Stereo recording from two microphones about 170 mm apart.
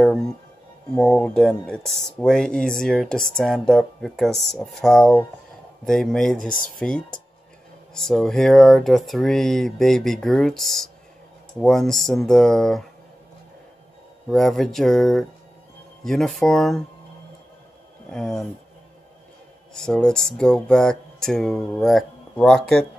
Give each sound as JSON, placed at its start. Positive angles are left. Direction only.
{"t": 0.0, "sound": "speech", "side_deg": 5}
{"t": 14.3, "sound": "speech", "side_deg": 0}
{"t": 18.1, "sound": "speech", "side_deg": 5}
{"t": 19.7, "sound": "speech", "side_deg": 5}